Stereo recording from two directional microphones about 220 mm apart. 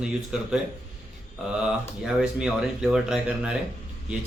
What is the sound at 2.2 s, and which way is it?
Speech, 5° right (ahead or behind).